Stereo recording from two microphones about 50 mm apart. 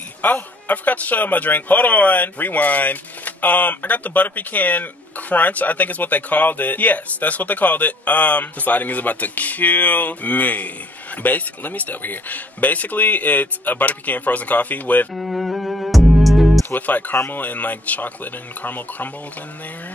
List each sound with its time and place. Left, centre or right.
0.2 s speech: left
15.1 s music: centre
16.7 s speech: left